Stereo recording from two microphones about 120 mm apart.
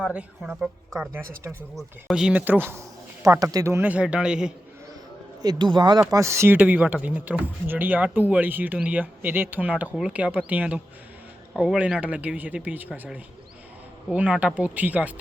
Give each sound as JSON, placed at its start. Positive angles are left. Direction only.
{"t": 0.0, "sound": "speech", "side_deg": -10}
{"t": 3.4, "sound": "speech", "side_deg": -30}
{"t": 3.8, "sound": "speech", "side_deg": -10}
{"t": 5.4, "sound": "speech", "side_deg": -35}
{"t": 14.1, "sound": "speech", "side_deg": -10}